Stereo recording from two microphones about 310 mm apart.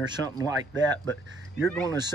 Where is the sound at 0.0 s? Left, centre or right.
Centre.